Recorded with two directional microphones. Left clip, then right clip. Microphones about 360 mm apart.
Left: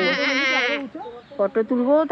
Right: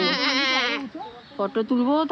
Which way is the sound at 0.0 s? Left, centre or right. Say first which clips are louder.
Left 2 dB; right.